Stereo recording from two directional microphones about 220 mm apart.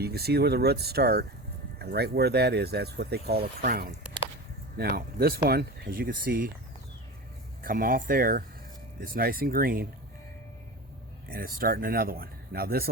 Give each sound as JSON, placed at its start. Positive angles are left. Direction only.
{"t": 0.0, "sound": "speech", "side_deg": -45}
{"t": 7.6, "sound": "speech", "side_deg": -40}
{"t": 11.3, "sound": "speech", "side_deg": -40}